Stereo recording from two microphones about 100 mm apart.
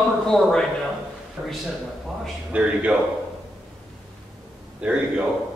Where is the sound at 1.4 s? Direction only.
15° right (ahead or behind).